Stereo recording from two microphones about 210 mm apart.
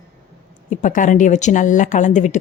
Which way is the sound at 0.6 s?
40° left (ahead or behind).